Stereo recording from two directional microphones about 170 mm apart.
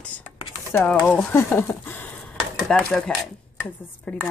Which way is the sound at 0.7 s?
15° left (ahead or behind).